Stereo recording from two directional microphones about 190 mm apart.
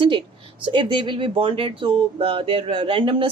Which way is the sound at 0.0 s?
25° right (ahead or behind).